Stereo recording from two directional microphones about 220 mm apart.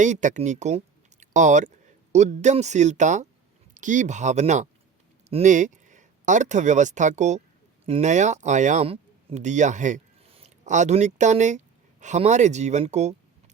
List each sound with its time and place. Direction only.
0.0 s speech: 35° right (ahead or behind)